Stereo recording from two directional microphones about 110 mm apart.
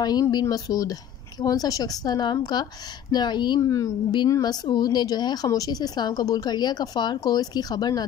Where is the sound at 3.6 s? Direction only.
30° left (ahead or behind).